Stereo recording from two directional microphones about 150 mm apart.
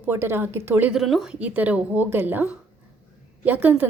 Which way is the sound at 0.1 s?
15° right (ahead or behind).